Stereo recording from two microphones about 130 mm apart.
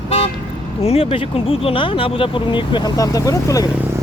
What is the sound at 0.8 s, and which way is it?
Speech, 50° left (ahead or behind).